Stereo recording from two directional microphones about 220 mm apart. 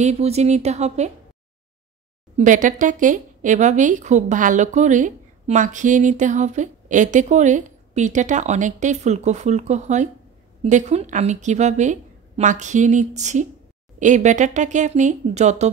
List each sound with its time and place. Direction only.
0.0 s speech: 30° right (ahead or behind)
2.3 s speech: 35° right (ahead or behind)